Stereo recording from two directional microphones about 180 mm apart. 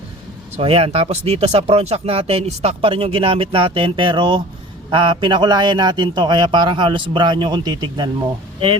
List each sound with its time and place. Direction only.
0.5 s a man's voice: 35° right (ahead or behind)